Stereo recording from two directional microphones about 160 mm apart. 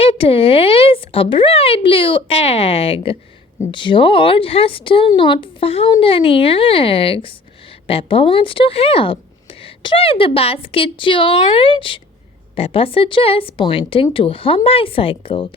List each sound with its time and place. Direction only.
0.0 s speech: 35° left (ahead or behind)